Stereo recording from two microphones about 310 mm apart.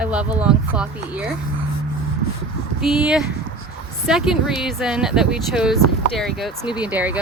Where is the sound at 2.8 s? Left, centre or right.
Centre.